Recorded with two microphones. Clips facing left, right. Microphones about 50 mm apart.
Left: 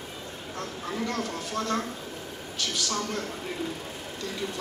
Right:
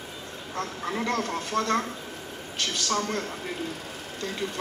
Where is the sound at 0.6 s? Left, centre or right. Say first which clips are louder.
Right 3 dB; right.